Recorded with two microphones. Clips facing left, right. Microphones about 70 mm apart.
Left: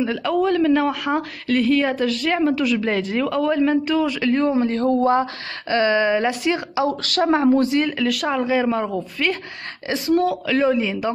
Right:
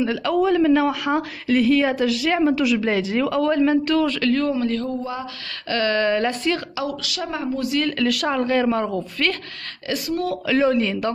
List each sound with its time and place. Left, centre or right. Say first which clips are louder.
0.0 s speech: even; centre
4.2 s speech: left 2 dB; left
4.8 s speech: left 10 dB; left
5.7 s speech: left 2 dB; centre
7.0 s speech: left 9 dB; left
7.8 s speech: even; centre
8.9 s speech: left 1 dB; centre
9.8 s speech: left 5 dB; left
10.4 s speech: even; centre